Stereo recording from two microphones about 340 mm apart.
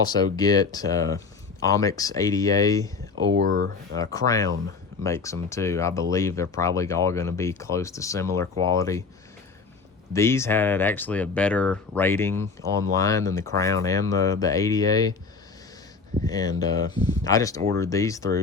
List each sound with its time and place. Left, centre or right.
0.1 s speech: centre
3.3 s speech: right
3.9 s speech: centre
10.1 s speech: centre
16.2 s speech: centre